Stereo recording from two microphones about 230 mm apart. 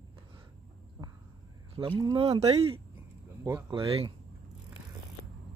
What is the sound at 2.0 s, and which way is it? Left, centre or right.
Speech, right.